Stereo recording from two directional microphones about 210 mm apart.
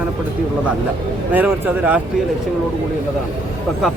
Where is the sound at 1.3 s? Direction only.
10° right (ahead or behind).